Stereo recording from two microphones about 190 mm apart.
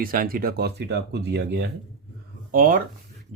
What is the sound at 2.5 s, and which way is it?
Speech, 50° right (ahead or behind).